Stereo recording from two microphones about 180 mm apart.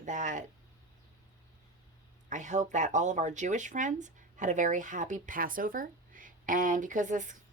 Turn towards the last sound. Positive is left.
turn(degrees=-45)  # may be behind; listen again after turning